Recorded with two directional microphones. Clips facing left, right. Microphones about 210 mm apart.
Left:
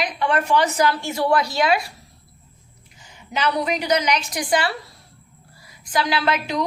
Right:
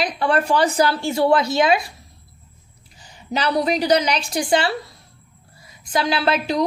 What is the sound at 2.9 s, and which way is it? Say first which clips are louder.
A woman's voice: right 3 dB; 35° right (ahead or behind).